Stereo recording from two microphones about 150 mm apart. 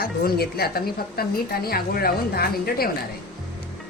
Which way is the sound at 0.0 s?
90° left.